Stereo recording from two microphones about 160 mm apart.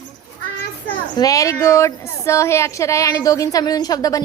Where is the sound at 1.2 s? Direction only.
20° left (ahead or behind).